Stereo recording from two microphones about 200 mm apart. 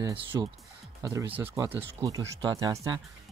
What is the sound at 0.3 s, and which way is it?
Speech, 15° right (ahead or behind).